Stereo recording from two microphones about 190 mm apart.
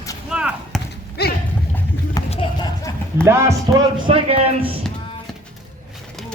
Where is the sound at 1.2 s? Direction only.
55° left (ahead or behind).